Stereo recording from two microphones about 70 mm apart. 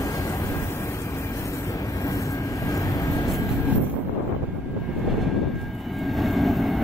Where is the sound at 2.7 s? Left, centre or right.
Left.